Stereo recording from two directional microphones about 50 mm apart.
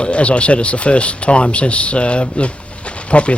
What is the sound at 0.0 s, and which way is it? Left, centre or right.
Speech, left.